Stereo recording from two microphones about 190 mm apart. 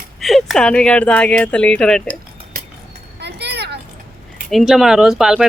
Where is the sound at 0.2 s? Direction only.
Centre (ahead or behind).